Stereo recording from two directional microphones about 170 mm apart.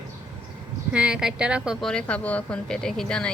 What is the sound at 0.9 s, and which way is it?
Speech, 5° right (ahead or behind).